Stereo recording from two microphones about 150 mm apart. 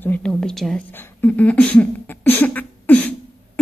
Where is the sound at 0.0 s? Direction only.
10° left (ahead or behind).